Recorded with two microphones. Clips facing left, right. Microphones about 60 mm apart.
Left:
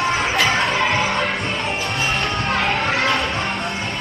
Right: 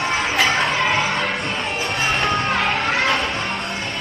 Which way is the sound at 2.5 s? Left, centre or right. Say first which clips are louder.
Even; centre.